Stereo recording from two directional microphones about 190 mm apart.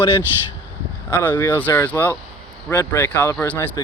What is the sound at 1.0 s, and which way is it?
Speech, 10° left (ahead or behind).